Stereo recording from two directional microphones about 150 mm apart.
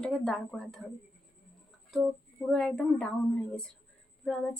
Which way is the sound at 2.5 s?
5° left (ahead or behind).